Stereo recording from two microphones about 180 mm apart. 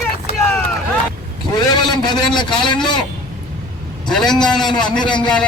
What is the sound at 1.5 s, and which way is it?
A man's voice, 25° left (ahead or behind).